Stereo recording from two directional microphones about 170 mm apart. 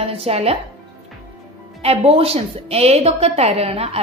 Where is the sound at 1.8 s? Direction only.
35° right (ahead or behind).